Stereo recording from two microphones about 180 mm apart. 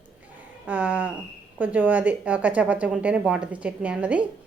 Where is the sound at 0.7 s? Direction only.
10° right (ahead or behind).